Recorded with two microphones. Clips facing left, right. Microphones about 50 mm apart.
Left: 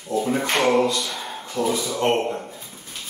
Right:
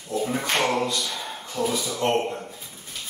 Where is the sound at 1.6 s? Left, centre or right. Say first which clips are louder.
Left 3 dB; left.